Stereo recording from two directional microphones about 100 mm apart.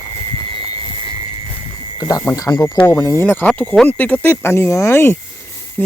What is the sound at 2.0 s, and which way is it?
Speech, 40° left (ahead or behind).